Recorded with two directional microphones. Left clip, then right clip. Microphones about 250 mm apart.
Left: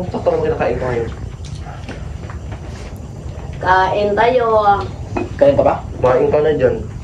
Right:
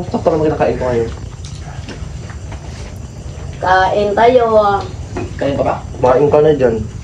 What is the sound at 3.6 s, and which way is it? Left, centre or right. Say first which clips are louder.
Speech: right 2 dB; centre.